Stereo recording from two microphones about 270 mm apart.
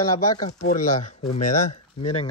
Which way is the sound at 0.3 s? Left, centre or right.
Centre.